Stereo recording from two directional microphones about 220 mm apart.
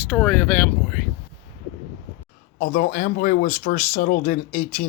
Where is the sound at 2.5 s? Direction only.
40° left (ahead or behind).